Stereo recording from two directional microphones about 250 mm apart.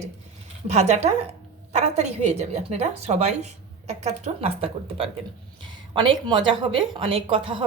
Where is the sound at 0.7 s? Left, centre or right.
Right.